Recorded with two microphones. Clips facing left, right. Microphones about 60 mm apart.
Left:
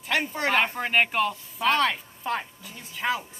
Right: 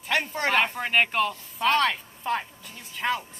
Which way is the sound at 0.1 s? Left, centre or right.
Centre.